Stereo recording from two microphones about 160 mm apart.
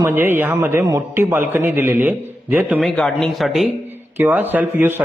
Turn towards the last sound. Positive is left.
turn(degrees=-10)  # may be behind; listen again after turning